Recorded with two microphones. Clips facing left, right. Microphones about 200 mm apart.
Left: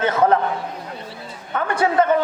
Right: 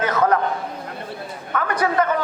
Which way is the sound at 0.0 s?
25° left (ahead or behind).